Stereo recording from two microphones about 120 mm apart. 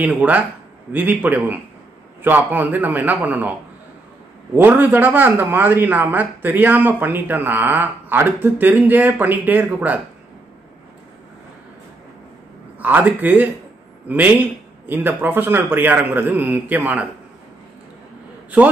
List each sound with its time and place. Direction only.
0.0 s speech: 10° right (ahead or behind)
4.6 s speech: 15° right (ahead or behind)
12.7 s speech: 15° right (ahead or behind)